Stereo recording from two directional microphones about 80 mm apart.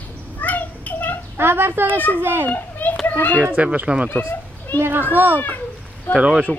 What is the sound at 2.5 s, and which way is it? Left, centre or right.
Children playing, left.